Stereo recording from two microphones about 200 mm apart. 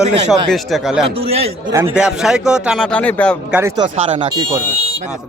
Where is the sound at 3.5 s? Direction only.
10° right (ahead or behind).